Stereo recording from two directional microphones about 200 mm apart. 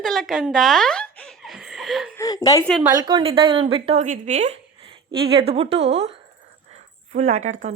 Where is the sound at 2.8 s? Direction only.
20° right (ahead or behind).